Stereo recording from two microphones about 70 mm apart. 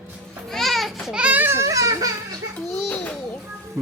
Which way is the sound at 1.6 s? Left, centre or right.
Right.